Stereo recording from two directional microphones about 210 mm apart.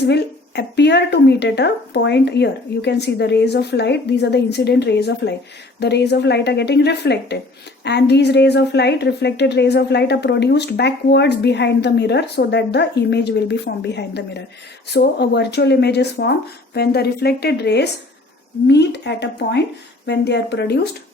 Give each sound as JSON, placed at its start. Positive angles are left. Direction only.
{"t": 0.0, "sound": "a woman's voice", "side_deg": 55}